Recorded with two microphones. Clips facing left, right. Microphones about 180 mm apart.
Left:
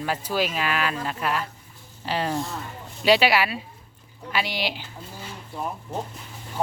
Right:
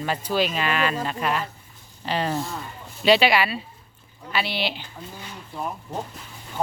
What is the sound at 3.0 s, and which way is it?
Speech, 10° left (ahead or behind).